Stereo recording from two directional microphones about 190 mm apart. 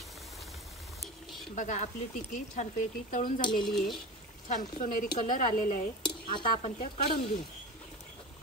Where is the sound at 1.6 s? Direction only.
40° left (ahead or behind).